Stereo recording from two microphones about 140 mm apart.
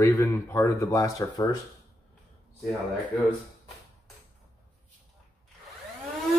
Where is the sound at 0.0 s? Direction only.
20° left (ahead or behind).